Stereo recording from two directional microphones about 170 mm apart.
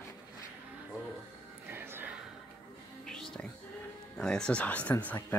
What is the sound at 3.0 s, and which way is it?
Music, 5° left (ahead or behind).